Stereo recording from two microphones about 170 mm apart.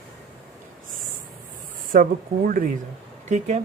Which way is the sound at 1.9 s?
55° right (ahead or behind).